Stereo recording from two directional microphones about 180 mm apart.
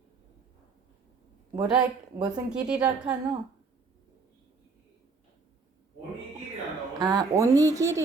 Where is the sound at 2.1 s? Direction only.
20° right (ahead or behind).